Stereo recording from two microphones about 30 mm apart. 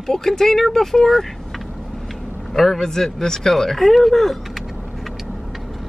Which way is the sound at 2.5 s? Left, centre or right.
Centre.